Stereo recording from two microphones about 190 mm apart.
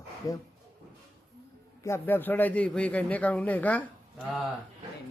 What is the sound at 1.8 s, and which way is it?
A man's voice, 10° left (ahead or behind).